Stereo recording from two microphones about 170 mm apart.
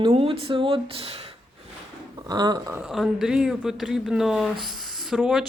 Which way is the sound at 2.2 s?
25° right (ahead or behind).